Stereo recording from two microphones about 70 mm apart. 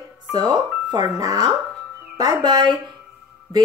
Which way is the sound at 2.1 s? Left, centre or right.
Right.